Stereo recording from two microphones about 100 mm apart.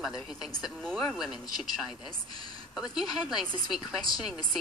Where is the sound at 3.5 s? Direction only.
45° left (ahead or behind).